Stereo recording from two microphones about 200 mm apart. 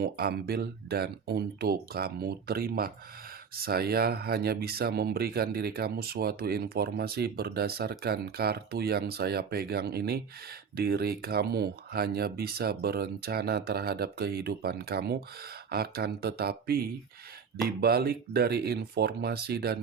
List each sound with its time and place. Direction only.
0.0 s speech: 50° right (ahead or behind)